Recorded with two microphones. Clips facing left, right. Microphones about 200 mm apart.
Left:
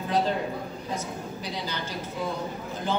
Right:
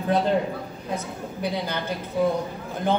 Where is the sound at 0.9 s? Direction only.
60° right (ahead or behind).